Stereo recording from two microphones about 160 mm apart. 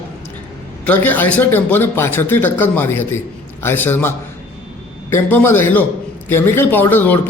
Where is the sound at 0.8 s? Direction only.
10° left (ahead or behind).